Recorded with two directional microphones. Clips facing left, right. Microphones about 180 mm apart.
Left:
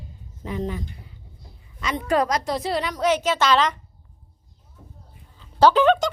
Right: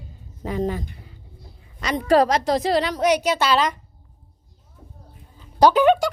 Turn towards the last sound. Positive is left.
turn(degrees=-10)  # may be behind; listen again after turning